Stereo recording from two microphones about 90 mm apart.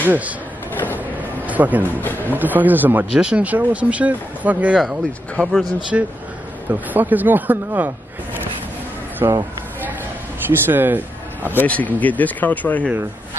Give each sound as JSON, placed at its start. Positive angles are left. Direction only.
{"t": 0.0, "sound": "speech", "side_deg": -20}
{"t": 0.9, "sound": "a sound", "side_deg": -20}
{"t": 2.0, "sound": "speech", "side_deg": 20}
{"t": 2.3, "sound": "speech", "side_deg": -20}
{"t": 5.3, "sound": "speech", "side_deg": 5}
{"t": 5.9, "sound": "speech", "side_deg": -10}
{"t": 9.2, "sound": "speech", "side_deg": -45}
{"t": 10.6, "sound": "a man's voice", "side_deg": -25}
{"t": 11.5, "sound": "speech", "side_deg": 15}